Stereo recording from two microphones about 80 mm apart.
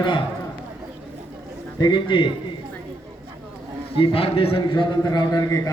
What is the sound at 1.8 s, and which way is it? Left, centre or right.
Speech, left.